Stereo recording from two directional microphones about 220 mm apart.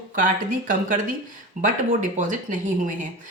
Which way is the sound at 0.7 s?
35° right (ahead or behind).